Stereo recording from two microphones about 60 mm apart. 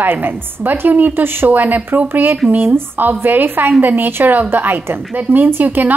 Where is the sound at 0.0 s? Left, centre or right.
Right.